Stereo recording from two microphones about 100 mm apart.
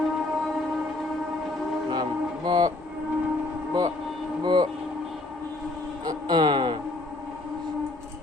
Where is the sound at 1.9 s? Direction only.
45° right (ahead or behind).